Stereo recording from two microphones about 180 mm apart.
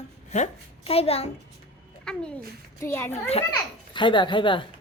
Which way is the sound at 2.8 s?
10° left (ahead or behind).